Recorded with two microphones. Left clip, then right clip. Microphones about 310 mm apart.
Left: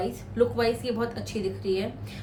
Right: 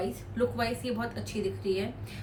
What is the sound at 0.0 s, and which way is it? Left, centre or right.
A woman's voice, centre.